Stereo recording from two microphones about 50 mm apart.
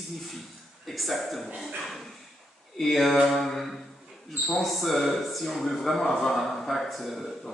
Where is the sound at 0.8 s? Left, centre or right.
Centre.